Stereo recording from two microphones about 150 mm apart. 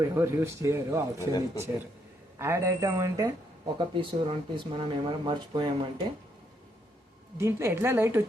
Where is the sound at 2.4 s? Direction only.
20° right (ahead or behind).